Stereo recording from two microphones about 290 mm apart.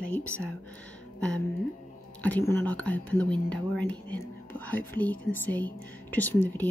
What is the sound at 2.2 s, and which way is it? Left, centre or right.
Speech, centre.